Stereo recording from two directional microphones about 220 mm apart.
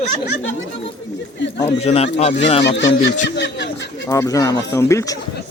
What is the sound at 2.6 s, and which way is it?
Speech, 55° left (ahead or behind).